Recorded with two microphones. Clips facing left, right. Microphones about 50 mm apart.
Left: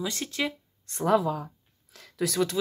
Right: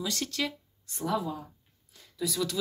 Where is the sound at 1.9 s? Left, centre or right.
Left.